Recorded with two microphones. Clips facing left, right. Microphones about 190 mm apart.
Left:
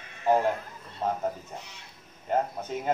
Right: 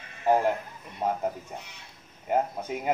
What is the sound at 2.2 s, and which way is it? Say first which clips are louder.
Speech: right 1 dB; 10° right (ahead or behind).